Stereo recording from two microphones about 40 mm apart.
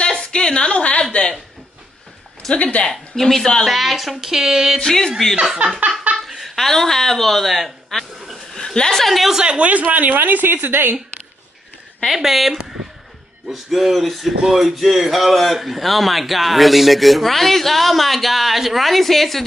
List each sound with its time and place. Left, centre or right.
0.1 s a sound: centre
2.5 s a woman's voice: left
2.9 s a woman's voice: centre
3.6 s speech: centre
4.7 s a woman's voice: centre
5.3 s speech: centre
5.8 s a sound: right
6.1 s laughter: centre
6.5 s speech: centre
8.5 s a woman's voice: centre
9.4 s speech: right
10.1 s a woman's voice: right
12.1 s a sound: centre